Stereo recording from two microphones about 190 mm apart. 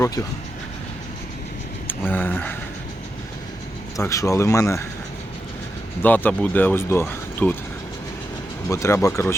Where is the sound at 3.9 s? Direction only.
15° left (ahead or behind).